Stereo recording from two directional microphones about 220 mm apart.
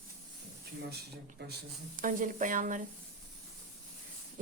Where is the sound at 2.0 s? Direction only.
35° right (ahead or behind).